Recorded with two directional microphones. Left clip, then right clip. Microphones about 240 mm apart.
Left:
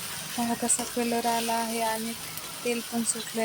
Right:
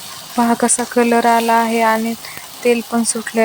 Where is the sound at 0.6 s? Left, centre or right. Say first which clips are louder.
Right 14 dB; centre.